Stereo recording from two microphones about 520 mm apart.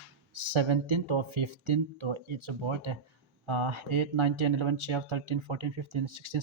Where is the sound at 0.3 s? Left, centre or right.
Right.